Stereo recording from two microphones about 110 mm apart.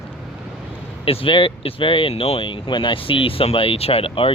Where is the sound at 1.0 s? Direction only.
55° left (ahead or behind).